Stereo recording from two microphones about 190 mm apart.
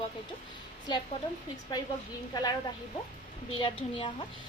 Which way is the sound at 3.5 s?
25° left (ahead or behind).